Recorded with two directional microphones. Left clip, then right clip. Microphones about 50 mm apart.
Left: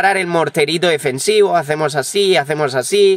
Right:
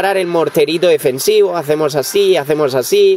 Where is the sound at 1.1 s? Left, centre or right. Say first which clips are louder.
Right 1 dB; right.